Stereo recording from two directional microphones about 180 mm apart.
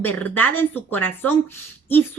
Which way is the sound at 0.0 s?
10° left (ahead or behind).